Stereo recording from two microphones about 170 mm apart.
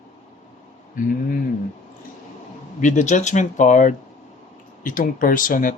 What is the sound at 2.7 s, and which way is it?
Speech, 45° left (ahead or behind).